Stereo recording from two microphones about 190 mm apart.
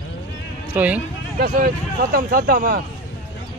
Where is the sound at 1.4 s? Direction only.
50° right (ahead or behind).